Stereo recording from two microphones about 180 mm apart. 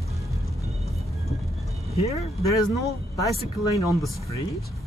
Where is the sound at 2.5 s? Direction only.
20° left (ahead or behind).